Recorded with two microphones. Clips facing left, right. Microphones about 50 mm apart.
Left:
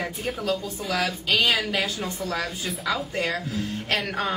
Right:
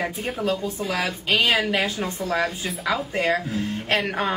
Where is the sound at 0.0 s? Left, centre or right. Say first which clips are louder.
Right 3 dB; centre.